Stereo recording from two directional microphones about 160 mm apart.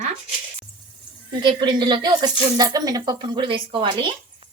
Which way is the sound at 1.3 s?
30° right (ahead or behind).